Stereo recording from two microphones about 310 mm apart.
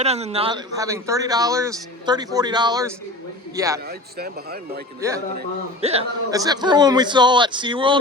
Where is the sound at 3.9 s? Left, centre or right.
Right.